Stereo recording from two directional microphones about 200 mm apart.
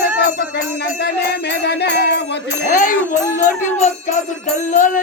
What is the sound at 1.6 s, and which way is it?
Music, 55° left (ahead or behind).